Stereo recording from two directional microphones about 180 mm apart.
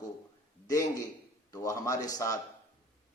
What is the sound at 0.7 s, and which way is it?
A man's voice, 20° left (ahead or behind).